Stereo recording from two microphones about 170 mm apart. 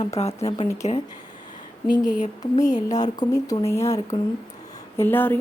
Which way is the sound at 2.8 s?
20° left (ahead or behind).